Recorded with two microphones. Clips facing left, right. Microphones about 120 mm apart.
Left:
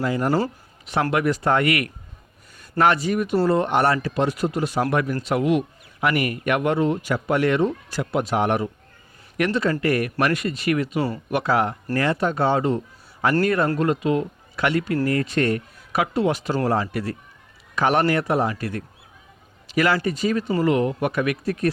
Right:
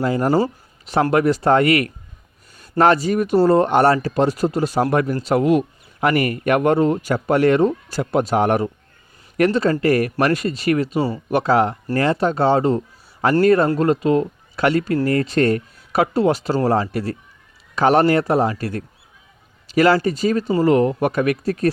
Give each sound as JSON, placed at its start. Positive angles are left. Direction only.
{"t": 0.0, "sound": "speech", "side_deg": -30}